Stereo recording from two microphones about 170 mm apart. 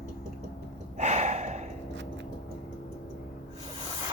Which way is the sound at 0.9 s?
40° right (ahead or behind).